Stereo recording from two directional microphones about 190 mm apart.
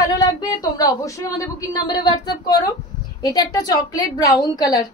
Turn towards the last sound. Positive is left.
turn(degrees=20)  # may be behind; listen again after turning